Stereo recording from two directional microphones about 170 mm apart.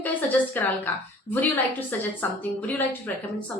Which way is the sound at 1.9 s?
10° left (ahead or behind).